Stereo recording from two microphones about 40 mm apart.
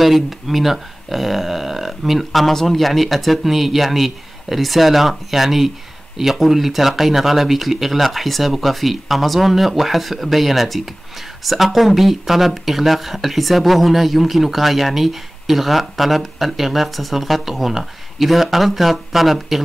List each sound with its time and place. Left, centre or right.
0.0 s speech: centre